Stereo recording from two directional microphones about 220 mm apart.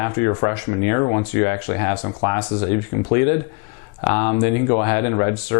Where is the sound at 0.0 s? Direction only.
20° left (ahead or behind).